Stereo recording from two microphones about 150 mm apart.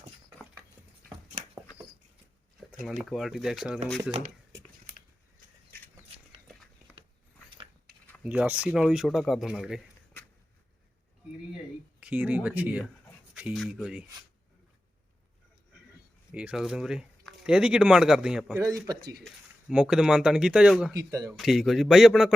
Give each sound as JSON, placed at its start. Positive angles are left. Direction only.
{"t": 2.8, "sound": "speech", "side_deg": 0}
{"t": 8.2, "sound": "speech", "side_deg": -10}
{"t": 11.9, "sound": "speech", "side_deg": -10}
{"t": 16.3, "sound": "speech", "side_deg": -5}
{"t": 18.6, "sound": "speech", "side_deg": -25}
{"t": 19.2, "sound": "speech", "side_deg": -5}
{"t": 20.9, "sound": "speech", "side_deg": -20}
{"t": 21.3, "sound": "speech", "side_deg": 0}